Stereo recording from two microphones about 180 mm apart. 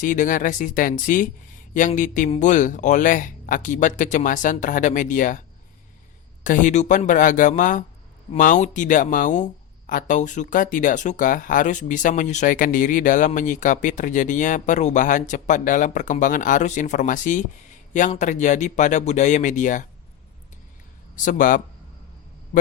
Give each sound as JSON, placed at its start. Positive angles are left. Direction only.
{"t": 0.0, "sound": "speech", "side_deg": 45}
{"t": 6.4, "sound": "speech", "side_deg": 45}
{"t": 21.2, "sound": "speech", "side_deg": 45}